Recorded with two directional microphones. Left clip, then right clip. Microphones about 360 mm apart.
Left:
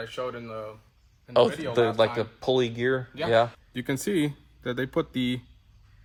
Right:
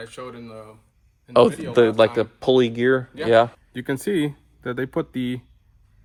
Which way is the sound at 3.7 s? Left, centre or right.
Centre.